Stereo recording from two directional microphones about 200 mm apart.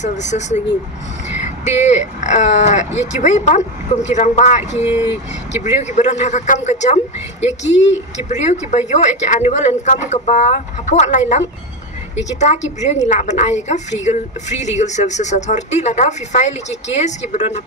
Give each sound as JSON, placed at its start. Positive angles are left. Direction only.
{"t": 0.0, "sound": "speech", "side_deg": 35}